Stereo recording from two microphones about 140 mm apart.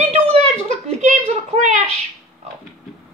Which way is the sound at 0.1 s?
50° right (ahead or behind).